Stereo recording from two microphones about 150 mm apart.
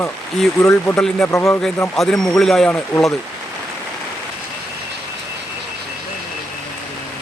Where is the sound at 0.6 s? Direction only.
15° left (ahead or behind).